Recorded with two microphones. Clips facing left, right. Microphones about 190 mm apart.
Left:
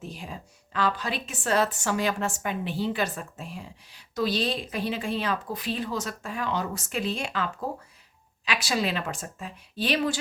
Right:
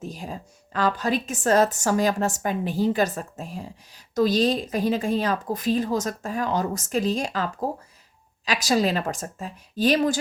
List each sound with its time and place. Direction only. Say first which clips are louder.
0.0 s a woman's voice: right 4 dB; 40° right (ahead or behind)